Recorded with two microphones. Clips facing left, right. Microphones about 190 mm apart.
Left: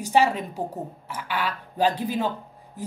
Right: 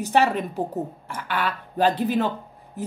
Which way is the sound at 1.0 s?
10° left (ahead or behind).